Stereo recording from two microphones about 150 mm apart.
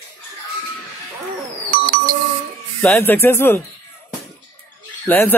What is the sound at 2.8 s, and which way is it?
Speech, 10° left (ahead or behind).